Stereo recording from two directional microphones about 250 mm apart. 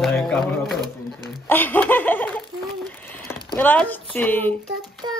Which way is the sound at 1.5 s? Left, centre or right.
Centre.